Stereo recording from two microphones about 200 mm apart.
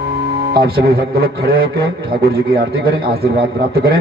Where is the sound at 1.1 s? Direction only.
50° right (ahead or behind).